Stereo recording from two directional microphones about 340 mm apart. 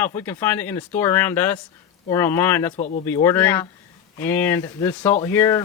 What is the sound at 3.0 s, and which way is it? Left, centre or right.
Speech, centre.